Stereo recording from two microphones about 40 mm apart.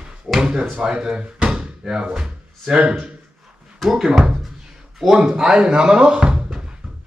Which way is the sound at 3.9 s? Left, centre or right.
Centre.